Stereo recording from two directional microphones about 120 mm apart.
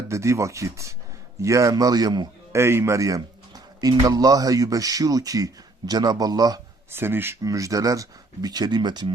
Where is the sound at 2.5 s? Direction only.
20° right (ahead or behind).